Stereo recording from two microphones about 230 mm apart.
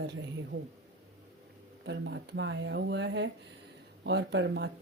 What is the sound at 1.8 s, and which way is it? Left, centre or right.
Speech, right.